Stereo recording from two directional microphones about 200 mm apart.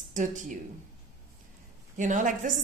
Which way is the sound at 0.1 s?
40° right (ahead or behind).